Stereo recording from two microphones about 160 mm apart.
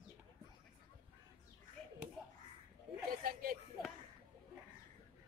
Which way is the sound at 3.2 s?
65° right (ahead or behind).